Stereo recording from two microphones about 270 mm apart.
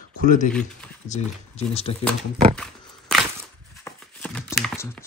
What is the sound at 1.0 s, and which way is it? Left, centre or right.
Speech, left.